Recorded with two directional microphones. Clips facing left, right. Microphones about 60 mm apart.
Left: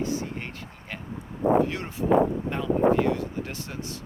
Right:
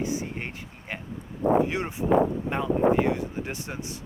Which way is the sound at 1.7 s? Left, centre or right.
Centre.